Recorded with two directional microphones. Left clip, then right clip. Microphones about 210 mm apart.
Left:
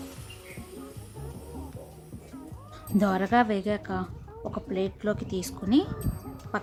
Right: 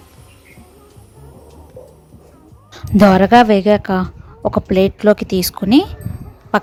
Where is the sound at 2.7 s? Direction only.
35° right (ahead or behind).